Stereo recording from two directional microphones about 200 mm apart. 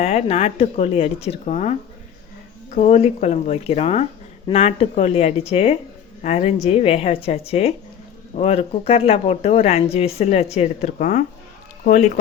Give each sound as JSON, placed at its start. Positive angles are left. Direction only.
{"t": 0.0, "sound": "speech", "side_deg": 30}